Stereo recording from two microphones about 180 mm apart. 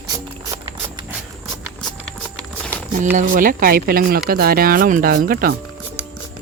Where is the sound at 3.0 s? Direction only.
45° right (ahead or behind).